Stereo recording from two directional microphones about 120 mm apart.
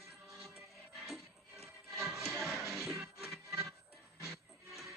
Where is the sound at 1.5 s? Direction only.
20° right (ahead or behind).